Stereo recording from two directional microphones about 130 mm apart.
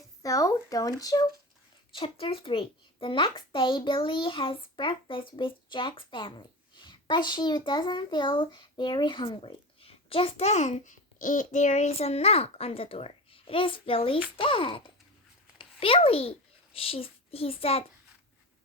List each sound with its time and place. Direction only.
0.2 s speech: 25° left (ahead or behind)
2.0 s a child's voice: 45° left (ahead or behind)